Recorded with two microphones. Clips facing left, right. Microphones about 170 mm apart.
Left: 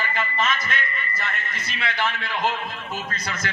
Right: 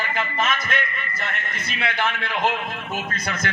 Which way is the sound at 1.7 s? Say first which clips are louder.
Right 2 dB; 55° right (ahead or behind).